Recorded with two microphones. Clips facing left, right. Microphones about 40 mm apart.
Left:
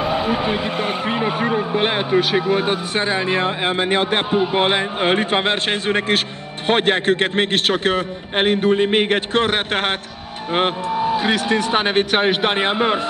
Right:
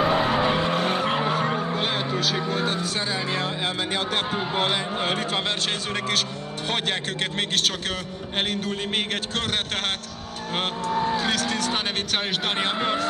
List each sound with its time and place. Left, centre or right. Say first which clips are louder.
0.0 s vehicle: left 1 dB; centre; by 1.8 s left
1.8 s vehicle: left 8 dB; left
2.5 s a man's voice: left 6 dB; left
10.9 s speech: left 5 dB; centre